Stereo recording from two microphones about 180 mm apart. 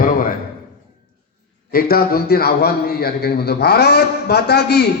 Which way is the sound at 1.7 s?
60° left (ahead or behind).